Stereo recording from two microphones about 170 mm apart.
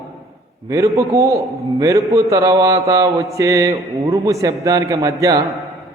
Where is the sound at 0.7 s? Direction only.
20° right (ahead or behind).